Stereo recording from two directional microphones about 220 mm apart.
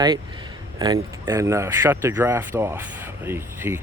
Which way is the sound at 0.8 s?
15° right (ahead or behind).